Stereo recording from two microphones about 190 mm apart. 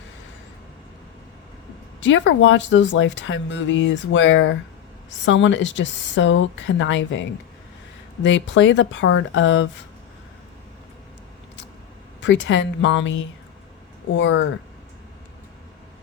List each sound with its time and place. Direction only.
2.0 s speech: 75° left (ahead or behind)
12.2 s speech: 75° left (ahead or behind)